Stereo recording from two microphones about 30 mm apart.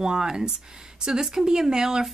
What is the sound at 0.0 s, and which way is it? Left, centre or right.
Speech, right.